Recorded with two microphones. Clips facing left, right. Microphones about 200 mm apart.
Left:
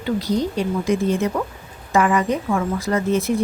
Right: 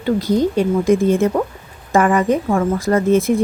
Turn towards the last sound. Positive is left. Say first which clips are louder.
# right 5 dB
turn(degrees=-50)  # may be behind; listen again after turning